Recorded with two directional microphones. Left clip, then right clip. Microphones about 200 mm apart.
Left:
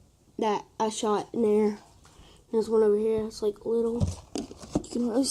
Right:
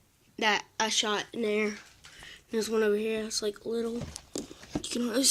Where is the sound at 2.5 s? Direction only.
35° right (ahead or behind).